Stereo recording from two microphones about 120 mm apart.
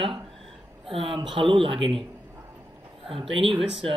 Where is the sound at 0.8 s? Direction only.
50° right (ahead or behind).